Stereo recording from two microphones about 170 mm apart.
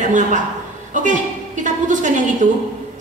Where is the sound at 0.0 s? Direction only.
45° right (ahead or behind).